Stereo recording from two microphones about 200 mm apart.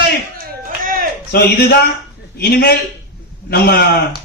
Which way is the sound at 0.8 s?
45° right (ahead or behind).